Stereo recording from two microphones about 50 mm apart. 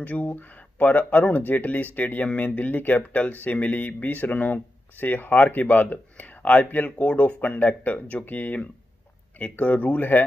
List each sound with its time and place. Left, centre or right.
0.0 s speech: left